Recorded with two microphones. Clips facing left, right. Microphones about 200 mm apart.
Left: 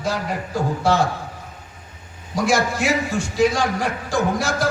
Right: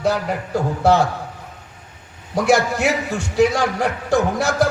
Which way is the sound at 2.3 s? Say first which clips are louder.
Right 3 dB; 65° right (ahead or behind).